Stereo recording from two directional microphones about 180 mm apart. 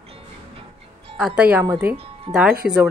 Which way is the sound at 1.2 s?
5° right (ahead or behind).